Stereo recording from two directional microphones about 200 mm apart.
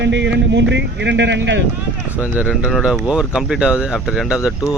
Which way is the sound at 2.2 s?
5° right (ahead or behind).